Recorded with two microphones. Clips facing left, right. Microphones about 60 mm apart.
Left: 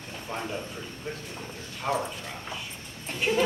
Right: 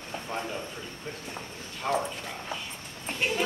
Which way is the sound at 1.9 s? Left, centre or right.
Centre.